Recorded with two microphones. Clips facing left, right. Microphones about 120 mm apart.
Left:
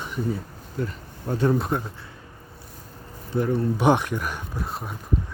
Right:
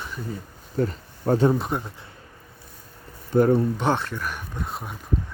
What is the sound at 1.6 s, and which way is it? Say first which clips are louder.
Speech: left 1 dB; centre (ahead or behind).